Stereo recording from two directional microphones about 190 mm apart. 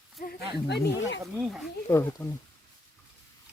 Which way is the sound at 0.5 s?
60° left (ahead or behind).